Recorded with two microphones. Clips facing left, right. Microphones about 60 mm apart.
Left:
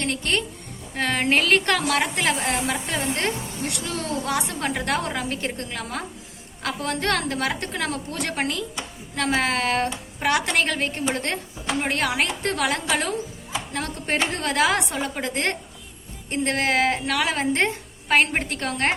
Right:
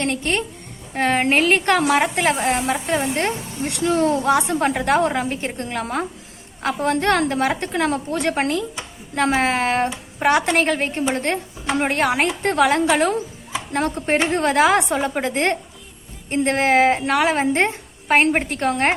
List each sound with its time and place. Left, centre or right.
0.0 s a woman's voice: right